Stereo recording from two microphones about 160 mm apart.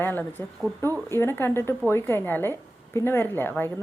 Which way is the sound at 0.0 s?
10° left (ahead or behind).